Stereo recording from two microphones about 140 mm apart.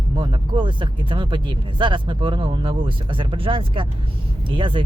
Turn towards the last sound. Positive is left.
turn(degrees=-35)  # may be behind; listen again after turning